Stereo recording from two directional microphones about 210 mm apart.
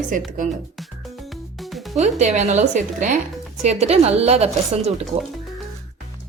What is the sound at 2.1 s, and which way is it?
A woman's voice, 35° right (ahead or behind).